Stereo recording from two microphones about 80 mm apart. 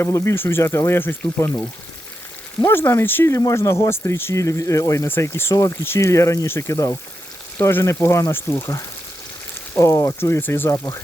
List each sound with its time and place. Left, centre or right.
0.0 s speech: left
3.3 s speech: left
5.0 s speech: left
7.7 s speech: left